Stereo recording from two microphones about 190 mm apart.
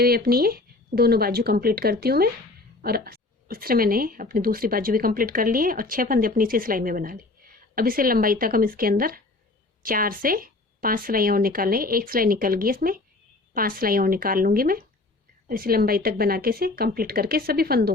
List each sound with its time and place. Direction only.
0.0 s a woman's voice: 55° right (ahead or behind)